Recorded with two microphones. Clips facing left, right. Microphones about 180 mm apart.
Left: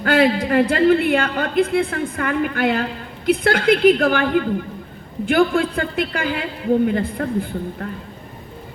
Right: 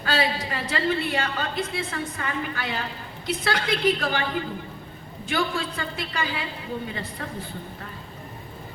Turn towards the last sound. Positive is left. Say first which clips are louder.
# left 11 dB
turn(degrees=55)  # may be behind; listen again after turning